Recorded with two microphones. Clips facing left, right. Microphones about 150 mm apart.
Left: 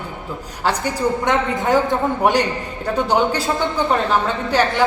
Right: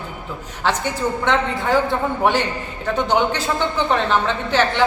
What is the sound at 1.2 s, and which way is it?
A woman's voice, 15° left (ahead or behind).